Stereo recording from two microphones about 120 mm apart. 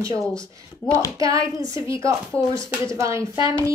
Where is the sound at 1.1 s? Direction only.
30° right (ahead or behind).